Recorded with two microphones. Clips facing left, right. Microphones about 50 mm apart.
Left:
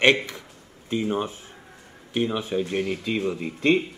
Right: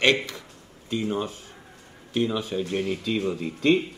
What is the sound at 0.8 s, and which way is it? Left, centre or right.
A man's voice, left.